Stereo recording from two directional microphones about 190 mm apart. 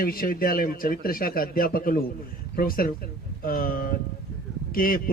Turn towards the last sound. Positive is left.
turn(degrees=50)  # may be behind; listen again after turning